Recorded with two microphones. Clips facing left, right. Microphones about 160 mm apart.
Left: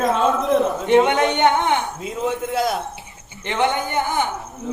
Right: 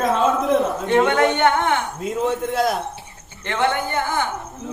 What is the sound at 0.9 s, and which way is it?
Speech, 20° left (ahead or behind).